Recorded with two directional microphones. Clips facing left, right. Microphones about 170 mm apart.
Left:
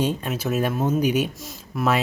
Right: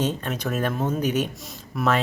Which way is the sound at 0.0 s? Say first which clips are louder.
Left 2 dB; 10° left (ahead or behind).